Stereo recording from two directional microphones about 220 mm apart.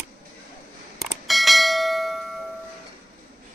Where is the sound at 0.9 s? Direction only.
Centre (ahead or behind).